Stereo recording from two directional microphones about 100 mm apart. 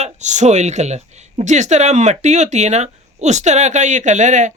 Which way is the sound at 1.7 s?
90° right.